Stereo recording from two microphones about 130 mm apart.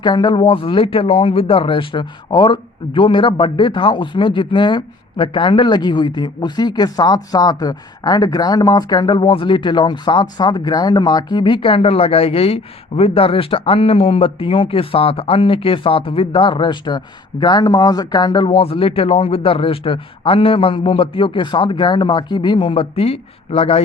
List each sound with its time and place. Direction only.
0.0 s speech: 35° left (ahead or behind)